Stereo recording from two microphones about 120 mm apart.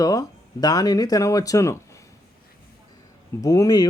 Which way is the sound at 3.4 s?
30° left (ahead or behind).